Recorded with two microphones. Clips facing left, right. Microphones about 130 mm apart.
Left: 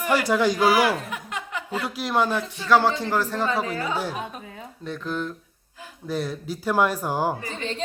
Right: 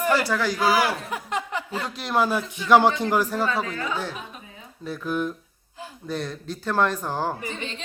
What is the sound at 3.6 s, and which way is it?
Speech, 30° left (ahead or behind).